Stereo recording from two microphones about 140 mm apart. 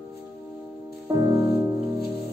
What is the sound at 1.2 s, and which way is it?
Music, 20° right (ahead or behind).